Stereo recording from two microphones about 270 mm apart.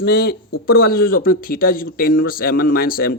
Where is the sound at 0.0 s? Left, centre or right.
Left.